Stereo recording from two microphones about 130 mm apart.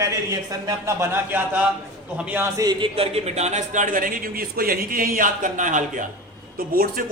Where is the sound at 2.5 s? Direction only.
35° right (ahead or behind).